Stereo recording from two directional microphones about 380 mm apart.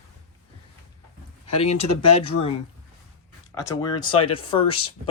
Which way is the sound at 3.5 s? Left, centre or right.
Centre.